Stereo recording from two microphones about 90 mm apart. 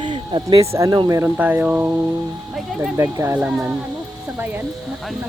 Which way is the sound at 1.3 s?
20° right (ahead or behind).